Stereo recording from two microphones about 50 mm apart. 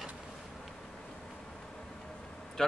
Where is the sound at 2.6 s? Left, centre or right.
Centre.